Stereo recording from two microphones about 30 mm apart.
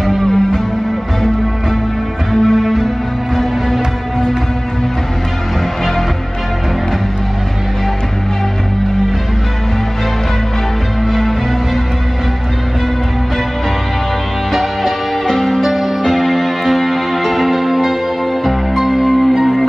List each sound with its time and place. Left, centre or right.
0.2 s music: centre
2.4 s music: centre
14.5 s music: centre
15.2 s music: centre